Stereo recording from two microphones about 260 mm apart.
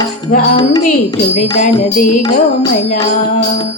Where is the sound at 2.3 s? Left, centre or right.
Centre.